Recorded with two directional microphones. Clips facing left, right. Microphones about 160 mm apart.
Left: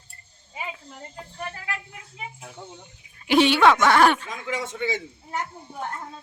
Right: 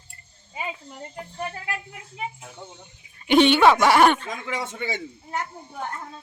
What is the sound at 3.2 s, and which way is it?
Speech, centre (ahead or behind).